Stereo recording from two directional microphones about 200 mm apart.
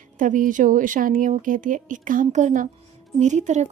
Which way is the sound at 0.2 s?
40° right (ahead or behind).